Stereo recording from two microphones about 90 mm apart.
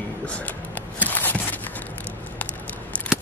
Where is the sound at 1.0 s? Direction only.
20° left (ahead or behind).